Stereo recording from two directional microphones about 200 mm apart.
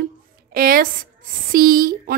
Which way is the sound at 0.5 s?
45° right (ahead or behind).